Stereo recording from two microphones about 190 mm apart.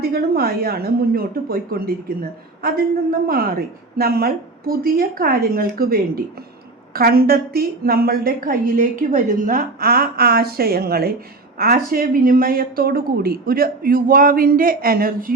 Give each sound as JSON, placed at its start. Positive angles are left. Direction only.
{"t": 0.0, "sound": "a woman's voice", "side_deg": -55}